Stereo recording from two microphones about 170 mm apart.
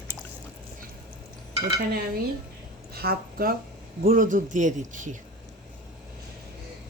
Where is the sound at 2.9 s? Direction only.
65° right (ahead or behind); by 5.2 s 50° right (ahead or behind).